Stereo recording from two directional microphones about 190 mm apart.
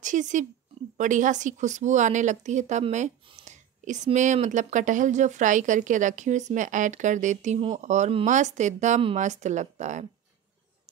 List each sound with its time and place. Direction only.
0.0 s speech: 40° right (ahead or behind)